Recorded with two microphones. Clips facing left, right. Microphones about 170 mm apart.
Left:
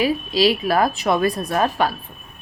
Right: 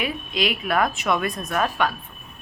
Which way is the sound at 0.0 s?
35° left (ahead or behind).